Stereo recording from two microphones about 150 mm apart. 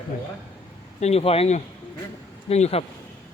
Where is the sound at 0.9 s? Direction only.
45° left (ahead or behind).